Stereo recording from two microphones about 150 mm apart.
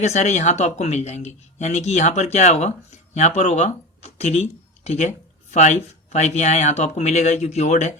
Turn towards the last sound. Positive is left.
turn(degrees=50)  # may be behind; listen again after turning